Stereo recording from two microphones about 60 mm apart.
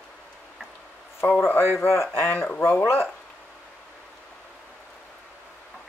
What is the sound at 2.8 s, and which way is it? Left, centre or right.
Speech, left.